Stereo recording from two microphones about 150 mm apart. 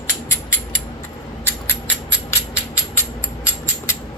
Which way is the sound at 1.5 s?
15° left (ahead or behind).